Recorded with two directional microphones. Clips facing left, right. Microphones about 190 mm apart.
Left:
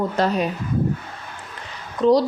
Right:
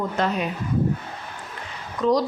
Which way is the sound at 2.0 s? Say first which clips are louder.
Left 4 dB; 30° left (ahead or behind).